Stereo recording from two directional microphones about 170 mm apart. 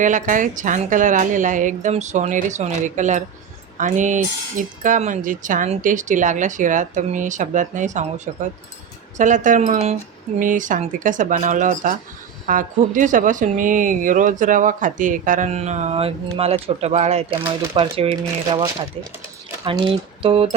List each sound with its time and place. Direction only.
0.0 s speech: 50° right (ahead or behind); by 20.5 s 35° right (ahead or behind)